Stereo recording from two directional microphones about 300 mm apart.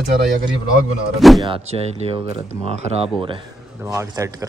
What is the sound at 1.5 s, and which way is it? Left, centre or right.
Speech, centre.